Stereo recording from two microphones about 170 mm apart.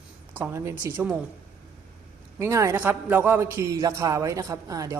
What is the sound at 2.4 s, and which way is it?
Speech, 15° right (ahead or behind).